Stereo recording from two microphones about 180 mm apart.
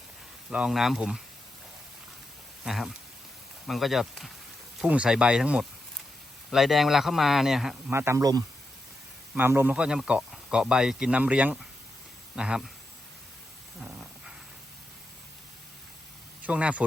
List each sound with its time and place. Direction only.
0.5 s speech: 5° right (ahead or behind)
2.6 s speech: centre (ahead or behind)
7.9 s speech: 15° right (ahead or behind)
13.8 s dog: 5° right (ahead or behind)
16.4 s speech: 5° right (ahead or behind)